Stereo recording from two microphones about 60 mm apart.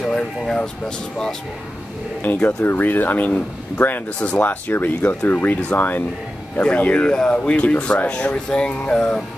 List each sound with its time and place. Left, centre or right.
0.1 s a sound: centre
2.2 s speech: left
2.6 s speech: left; by 9.2 s centre